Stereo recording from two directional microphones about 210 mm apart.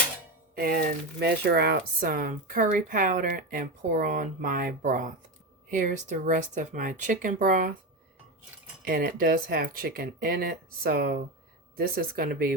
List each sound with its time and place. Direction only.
0.5 s speech: 45° right (ahead or behind)
8.8 s speech: 45° right (ahead or behind)